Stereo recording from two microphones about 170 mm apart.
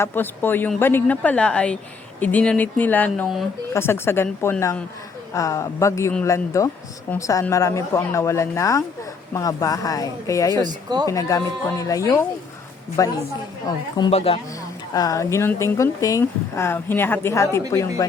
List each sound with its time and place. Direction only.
0.0 s speech: 10° left (ahead or behind)
10.5 s speech: 25° right (ahead or behind)
11.1 s speech: 20° left (ahead or behind); by 14.4 s 35° left (ahead or behind)
14.9 s speech: 20° left (ahead or behind)